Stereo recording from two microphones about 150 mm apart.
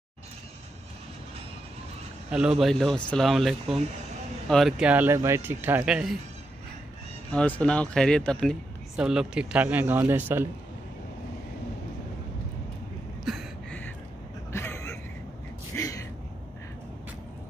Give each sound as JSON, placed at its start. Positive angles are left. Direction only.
{"t": 2.6, "sound": "speech", "side_deg": 0}
{"t": 7.3, "sound": "speech", "side_deg": 10}
{"t": 13.2, "sound": "a sound", "side_deg": 0}
{"t": 14.5, "sound": "vehicle", "side_deg": 15}
{"t": 15.7, "sound": "gasp", "side_deg": 20}